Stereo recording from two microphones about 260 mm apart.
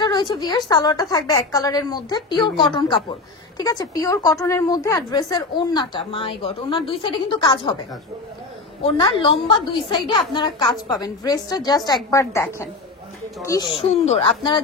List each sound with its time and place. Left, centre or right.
0.0 s a woman's voice: centre
8.8 s a woman's voice: left